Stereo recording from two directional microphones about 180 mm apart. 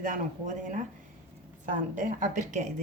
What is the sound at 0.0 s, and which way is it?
A woman's voice, 45° right (ahead or behind).